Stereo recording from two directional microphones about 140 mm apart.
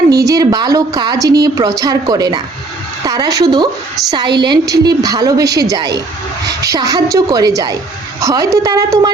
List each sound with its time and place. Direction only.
0.1 s a woman's voice: 25° right (ahead or behind)